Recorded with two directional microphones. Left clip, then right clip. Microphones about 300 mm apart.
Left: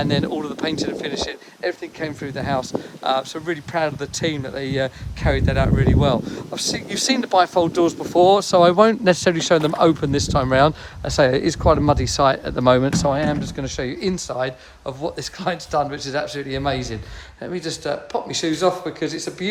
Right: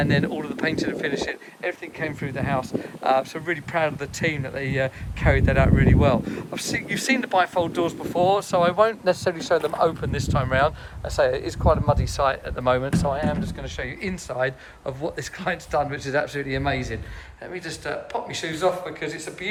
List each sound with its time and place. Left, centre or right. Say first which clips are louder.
0.0 s speech: left 2 dB; centre